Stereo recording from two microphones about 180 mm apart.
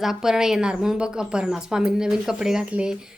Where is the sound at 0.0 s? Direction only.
Centre (ahead or behind).